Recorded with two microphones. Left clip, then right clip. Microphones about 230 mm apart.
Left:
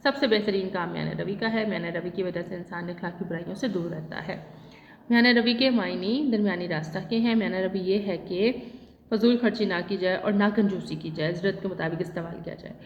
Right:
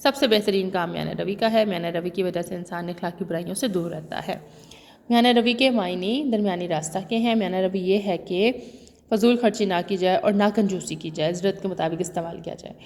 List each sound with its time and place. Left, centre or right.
0.0 s a woman's voice: right
5.0 s speech: right